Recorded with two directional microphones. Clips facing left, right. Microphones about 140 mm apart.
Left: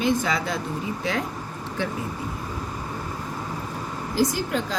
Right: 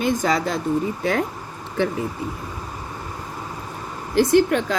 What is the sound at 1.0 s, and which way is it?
Speech, 55° right (ahead or behind).